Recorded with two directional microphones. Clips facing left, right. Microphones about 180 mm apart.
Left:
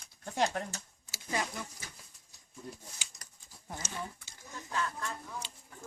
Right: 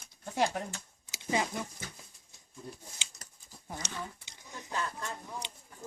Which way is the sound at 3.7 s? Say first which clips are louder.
Even; 20° right (ahead or behind).